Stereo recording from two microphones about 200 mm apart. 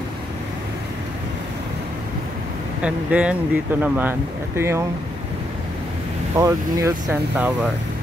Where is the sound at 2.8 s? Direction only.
5° right (ahead or behind).